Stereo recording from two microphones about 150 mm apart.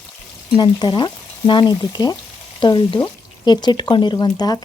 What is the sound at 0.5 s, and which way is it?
Speech, 30° left (ahead or behind).